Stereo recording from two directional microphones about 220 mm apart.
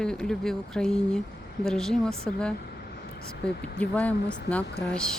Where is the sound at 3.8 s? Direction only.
5° left (ahead or behind).